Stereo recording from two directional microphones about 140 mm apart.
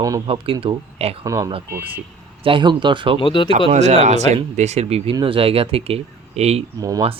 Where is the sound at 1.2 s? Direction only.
25° right (ahead or behind).